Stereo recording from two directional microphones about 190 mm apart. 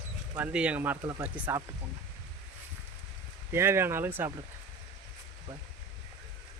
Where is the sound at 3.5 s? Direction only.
15° right (ahead or behind).